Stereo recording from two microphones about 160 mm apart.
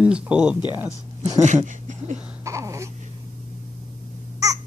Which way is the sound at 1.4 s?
45° right (ahead or behind).